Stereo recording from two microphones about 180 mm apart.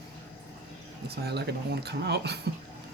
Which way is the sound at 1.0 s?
60° right (ahead or behind).